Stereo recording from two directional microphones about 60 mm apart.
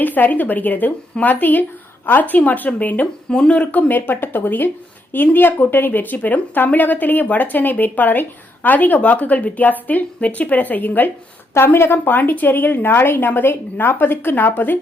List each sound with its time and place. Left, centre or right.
0.0 s speech: left
3.2 s a woman's voice: centre; by 11.1 s left
11.5 s a woman's voice: left